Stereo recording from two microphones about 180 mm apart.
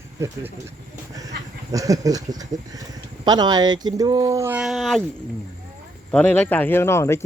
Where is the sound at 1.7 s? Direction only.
20° right (ahead or behind); by 5.0 s centre (ahead or behind).